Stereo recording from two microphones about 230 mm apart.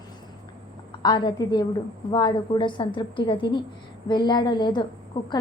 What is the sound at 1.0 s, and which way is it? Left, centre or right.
A woman's voice, centre.